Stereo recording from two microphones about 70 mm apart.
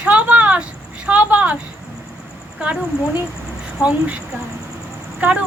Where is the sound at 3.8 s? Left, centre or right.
Centre.